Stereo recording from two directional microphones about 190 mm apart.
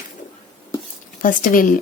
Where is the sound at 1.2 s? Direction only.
45° left (ahead or behind).